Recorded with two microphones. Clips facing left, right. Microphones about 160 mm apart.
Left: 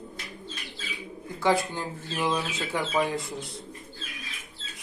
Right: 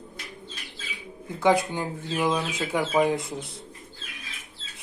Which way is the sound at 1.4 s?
20° right (ahead or behind).